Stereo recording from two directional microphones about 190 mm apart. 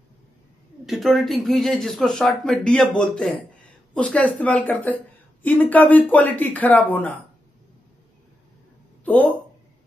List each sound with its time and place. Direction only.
0.8 s speech: centre (ahead or behind)
9.0 s speech: 10° left (ahead or behind)